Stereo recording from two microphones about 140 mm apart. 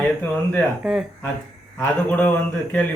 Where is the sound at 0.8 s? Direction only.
5° right (ahead or behind).